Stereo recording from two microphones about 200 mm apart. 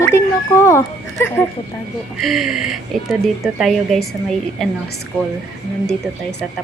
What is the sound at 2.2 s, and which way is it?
Speech, centre (ahead or behind).